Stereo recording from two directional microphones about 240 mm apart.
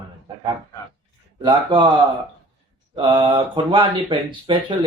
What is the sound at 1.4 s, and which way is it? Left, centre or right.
Speech, centre.